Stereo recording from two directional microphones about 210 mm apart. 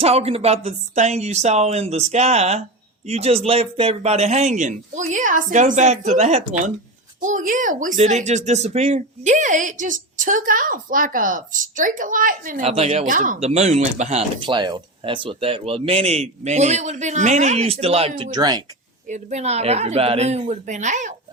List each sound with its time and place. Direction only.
0.0 s speech: 30° right (ahead or behind)
12.6 s speech: 30° right (ahead or behind)
19.0 s speech: 35° right (ahead or behind)